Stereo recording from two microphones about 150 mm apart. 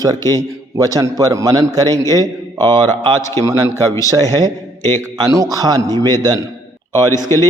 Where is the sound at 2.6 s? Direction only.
20° left (ahead or behind).